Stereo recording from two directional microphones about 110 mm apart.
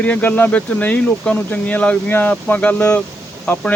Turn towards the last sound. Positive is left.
turn(degrees=10)  # may be behind; listen again after turning